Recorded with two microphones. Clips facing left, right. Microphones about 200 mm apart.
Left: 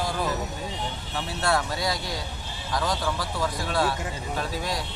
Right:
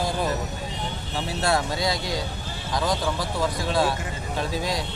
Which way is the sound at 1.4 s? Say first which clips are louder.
Right 2 dB; 20° right (ahead or behind).